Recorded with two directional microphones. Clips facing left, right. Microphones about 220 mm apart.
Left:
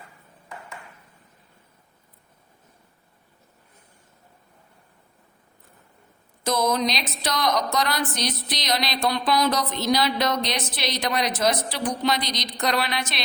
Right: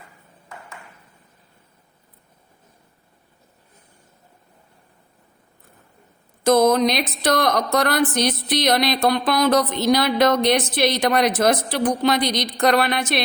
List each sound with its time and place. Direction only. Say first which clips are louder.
6.4 s a woman's voice: right 8 dB; 55° right (ahead or behind)